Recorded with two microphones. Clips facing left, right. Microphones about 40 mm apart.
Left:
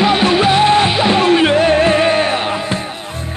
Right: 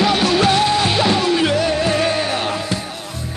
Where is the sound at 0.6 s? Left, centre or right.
Left.